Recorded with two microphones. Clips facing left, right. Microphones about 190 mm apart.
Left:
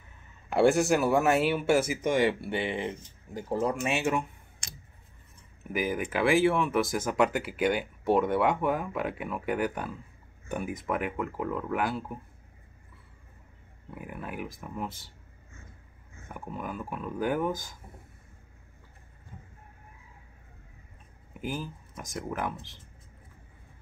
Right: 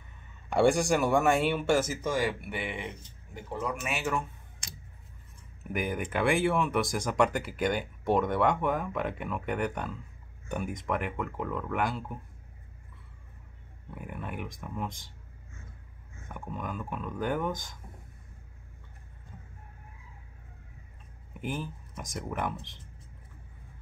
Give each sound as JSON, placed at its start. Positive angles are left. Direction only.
{"t": 0.5, "sound": "speech", "side_deg": 5}
{"t": 2.0, "sound": "speech", "side_deg": 25}
{"t": 5.6, "sound": "speech", "side_deg": 0}
{"t": 13.8, "sound": "speech", "side_deg": 5}
{"t": 16.3, "sound": "speech", "side_deg": 5}
{"t": 21.3, "sound": "speech", "side_deg": 0}